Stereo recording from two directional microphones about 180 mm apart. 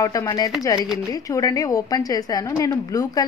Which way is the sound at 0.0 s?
20° left (ahead or behind).